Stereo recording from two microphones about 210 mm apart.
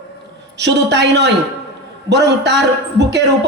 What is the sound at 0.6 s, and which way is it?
A man's voice, 55° right (ahead or behind).